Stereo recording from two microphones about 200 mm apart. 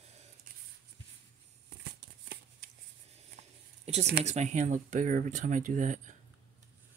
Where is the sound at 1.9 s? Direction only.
55° right (ahead or behind).